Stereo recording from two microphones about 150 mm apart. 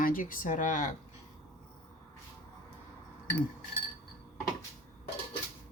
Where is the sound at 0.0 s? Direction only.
65° left (ahead or behind).